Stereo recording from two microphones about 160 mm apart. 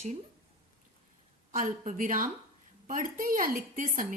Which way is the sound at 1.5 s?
55° right (ahead or behind).